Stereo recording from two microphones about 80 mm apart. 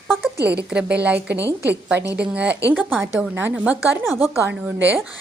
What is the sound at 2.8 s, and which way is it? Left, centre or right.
Speech, right.